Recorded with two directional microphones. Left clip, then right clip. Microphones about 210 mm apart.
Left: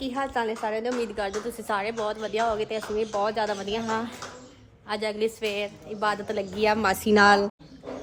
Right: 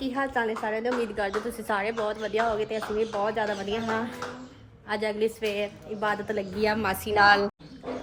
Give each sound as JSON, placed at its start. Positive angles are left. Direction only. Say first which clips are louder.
{"t": 0.0, "sound": "a woman's voice", "louder": "even", "side_deg": 5}
{"t": 6.6, "sound": "a woman's voice", "louder": "left 3 dB", "side_deg": 25}
{"t": 6.8, "sound": "a woman's voice", "louder": "left 2 dB", "side_deg": 45}